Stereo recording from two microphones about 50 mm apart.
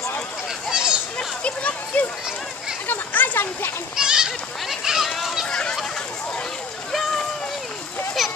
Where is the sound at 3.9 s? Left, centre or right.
Centre.